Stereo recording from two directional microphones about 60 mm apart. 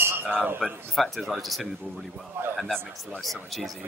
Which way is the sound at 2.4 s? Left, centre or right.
Right.